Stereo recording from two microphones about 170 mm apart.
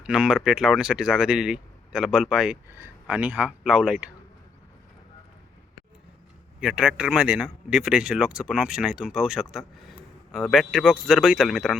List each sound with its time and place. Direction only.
0.0 s speech: 5° right (ahead or behind)
2.6 s speech: 15° right (ahead or behind)
6.6 s speech: 5° right (ahead or behind)